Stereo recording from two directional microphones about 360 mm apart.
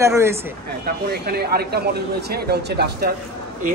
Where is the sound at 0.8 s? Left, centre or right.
Right.